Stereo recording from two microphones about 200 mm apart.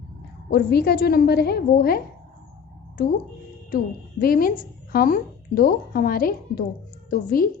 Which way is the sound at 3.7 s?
45° left (ahead or behind).